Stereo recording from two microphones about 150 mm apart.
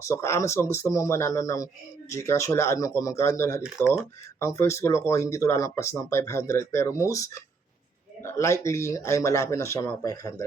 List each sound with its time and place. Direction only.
0.0 s speech: 20° left (ahead or behind)